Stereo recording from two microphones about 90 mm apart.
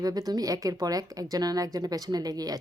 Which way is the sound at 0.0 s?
45° right (ahead or behind).